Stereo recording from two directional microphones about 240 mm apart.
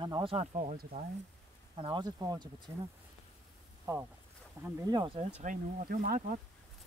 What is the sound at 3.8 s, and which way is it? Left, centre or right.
Speech, centre.